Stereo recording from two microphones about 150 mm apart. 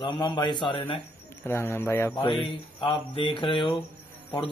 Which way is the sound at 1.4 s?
15° left (ahead or behind).